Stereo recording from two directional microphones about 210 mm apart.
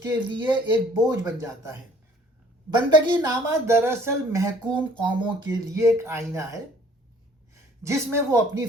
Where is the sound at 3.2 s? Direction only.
15° right (ahead or behind).